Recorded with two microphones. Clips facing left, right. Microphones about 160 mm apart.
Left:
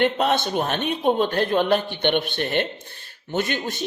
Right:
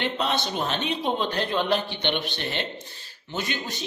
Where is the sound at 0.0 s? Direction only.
50° left (ahead or behind).